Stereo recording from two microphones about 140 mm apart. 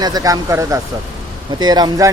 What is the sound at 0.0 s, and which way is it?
Speech, 25° right (ahead or behind).